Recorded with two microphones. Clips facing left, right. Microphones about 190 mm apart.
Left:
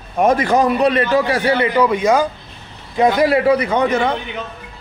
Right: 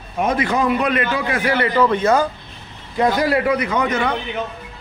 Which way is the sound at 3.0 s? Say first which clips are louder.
Left 3 dB; 25° left (ahead or behind).